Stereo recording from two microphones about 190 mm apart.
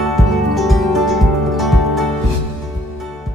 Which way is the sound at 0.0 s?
Centre (ahead or behind).